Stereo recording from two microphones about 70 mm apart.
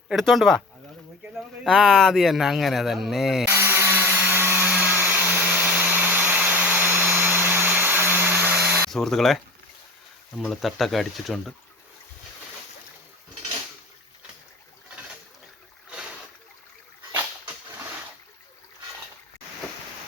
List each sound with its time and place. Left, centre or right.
0.2 s speech: centre
1.6 s speech: centre
3.4 s a sound: right
4.7 s blender: centre
5.3 s vacuum cleaner: right
8.9 s speech: centre
10.5 s speech: centre